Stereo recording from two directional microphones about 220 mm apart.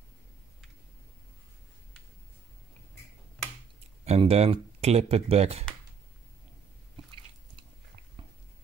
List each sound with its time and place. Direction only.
4.0 s speech: 30° right (ahead or behind)